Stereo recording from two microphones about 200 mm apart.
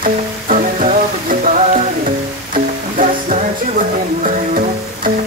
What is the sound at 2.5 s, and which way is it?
Music, 45° right (ahead or behind).